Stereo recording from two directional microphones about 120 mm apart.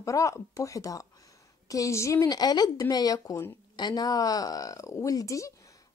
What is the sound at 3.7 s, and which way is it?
A woman's voice, 35° left (ahead or behind).